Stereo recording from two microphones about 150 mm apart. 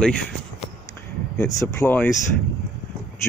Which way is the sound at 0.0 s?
5° left (ahead or behind).